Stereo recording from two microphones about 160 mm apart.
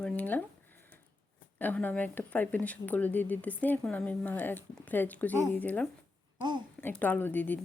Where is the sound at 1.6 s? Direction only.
10° left (ahead or behind).